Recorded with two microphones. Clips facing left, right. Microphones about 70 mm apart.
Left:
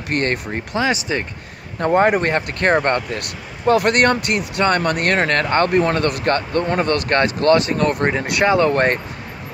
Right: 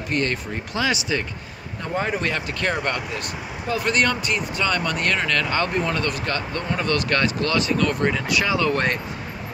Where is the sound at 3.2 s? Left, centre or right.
Left.